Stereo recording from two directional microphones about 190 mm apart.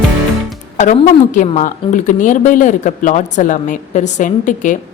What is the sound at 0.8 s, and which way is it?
A woman's voice, 40° left (ahead or behind).